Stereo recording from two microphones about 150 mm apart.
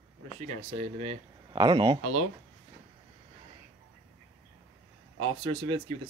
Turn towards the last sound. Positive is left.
turn(degrees=-35)  # may be behind; listen again after turning